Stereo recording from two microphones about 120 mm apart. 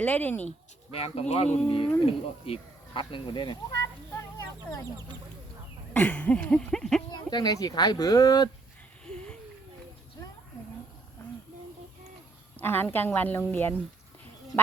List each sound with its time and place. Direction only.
0.0 s speech: 15° left (ahead or behind)
0.9 s speech: 55° left (ahead or behind); by 3.8 s 40° left (ahead or behind)
5.9 s speech: 15° left (ahead or behind)
7.3 s speech: 35° left (ahead or behind)
9.0 s a sound: 5° left (ahead or behind)
12.5 s speech: 15° left (ahead or behind)